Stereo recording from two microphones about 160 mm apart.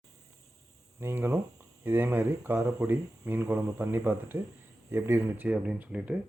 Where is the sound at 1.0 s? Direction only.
15° right (ahead or behind).